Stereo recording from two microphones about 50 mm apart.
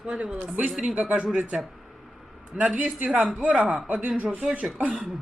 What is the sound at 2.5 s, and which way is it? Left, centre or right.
A woman's voice, right.